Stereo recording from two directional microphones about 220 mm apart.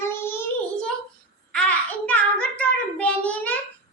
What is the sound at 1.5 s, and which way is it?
Child singing, 5° left (ahead or behind).